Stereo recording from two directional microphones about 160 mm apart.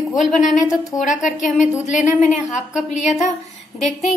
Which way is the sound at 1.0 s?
50° left (ahead or behind).